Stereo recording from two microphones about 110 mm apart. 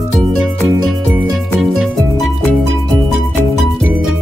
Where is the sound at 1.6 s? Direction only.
5° right (ahead or behind).